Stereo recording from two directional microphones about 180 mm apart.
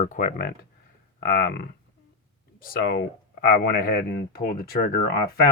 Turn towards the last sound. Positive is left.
turn(degrees=60)  # may be behind; listen again after turning